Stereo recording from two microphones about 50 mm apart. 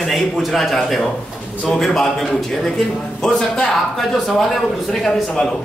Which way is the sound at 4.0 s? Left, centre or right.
Centre.